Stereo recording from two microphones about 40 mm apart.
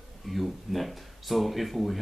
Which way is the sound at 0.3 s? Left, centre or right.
Centre.